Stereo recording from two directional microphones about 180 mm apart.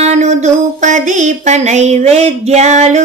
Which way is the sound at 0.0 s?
40° right (ahead or behind).